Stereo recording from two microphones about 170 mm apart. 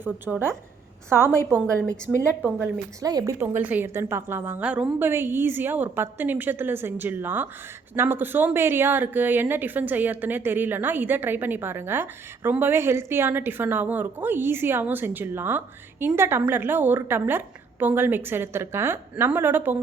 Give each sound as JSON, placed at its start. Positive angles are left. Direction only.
{"t": 0.0, "sound": "speech", "side_deg": -15}
{"t": 3.0, "sound": "speech", "side_deg": -20}
{"t": 3.4, "sound": "speech", "side_deg": -10}